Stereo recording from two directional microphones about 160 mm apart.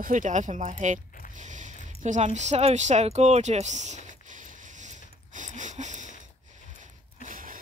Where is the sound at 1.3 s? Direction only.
50° right (ahead or behind).